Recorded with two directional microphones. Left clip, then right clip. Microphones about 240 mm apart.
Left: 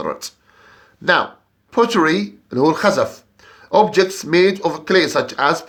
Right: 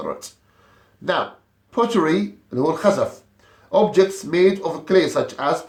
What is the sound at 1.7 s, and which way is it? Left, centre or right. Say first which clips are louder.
Speech: left 4 dB; left.